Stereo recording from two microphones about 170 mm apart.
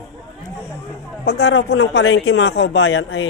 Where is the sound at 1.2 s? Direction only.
85° left.